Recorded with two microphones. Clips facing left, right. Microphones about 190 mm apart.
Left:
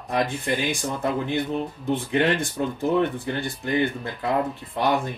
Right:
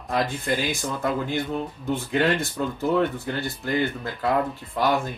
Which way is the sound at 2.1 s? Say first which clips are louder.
Even; 15° left (ahead or behind).